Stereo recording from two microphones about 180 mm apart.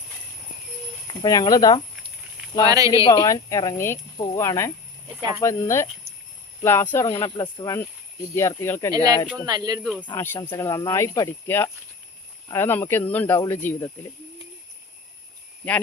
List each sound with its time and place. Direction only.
1.0 s speech: 20° left (ahead or behind)
2.6 s speech: 20° right (ahead or behind)
3.1 s speech: 20° left (ahead or behind)
7.3 s speech: 25° left (ahead or behind)
9.5 s speech: 20° right (ahead or behind)
9.8 s speech: 5° right (ahead or behind)
10.1 s speech: 15° left (ahead or behind)